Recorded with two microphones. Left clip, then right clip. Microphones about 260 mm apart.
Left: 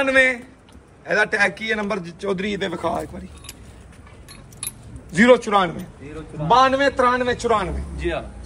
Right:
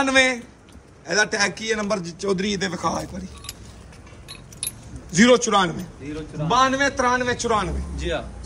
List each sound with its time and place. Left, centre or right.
0.0 s a man's voice: centre
4.6 s a sound: centre
6.4 s a man's voice: centre
8.0 s speech: left